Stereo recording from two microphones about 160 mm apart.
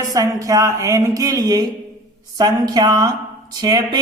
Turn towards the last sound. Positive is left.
turn(degrees=-25)  # may be behind; listen again after turning